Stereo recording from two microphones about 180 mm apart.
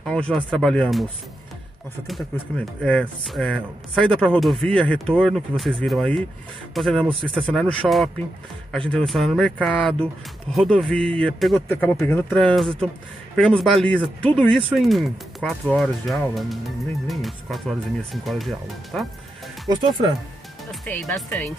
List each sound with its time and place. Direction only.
0.0 s speech: 5° left (ahead or behind)
2.3 s speech: 5° left (ahead or behind)
7.1 s speech: 30° right (ahead or behind)
7.4 s speech: 5° left (ahead or behind)
19.7 s speech: 20° right (ahead or behind)
20.8 s speech: 5° left (ahead or behind)